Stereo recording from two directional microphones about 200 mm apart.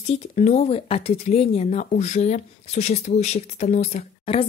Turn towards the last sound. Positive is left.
turn(degrees=30)  # may be behind; listen again after turning